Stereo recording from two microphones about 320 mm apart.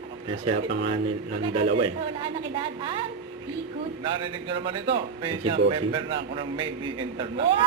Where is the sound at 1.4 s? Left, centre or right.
Centre.